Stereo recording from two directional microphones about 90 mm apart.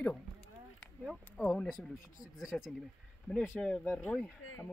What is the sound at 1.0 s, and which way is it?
Speech, 5° right (ahead or behind).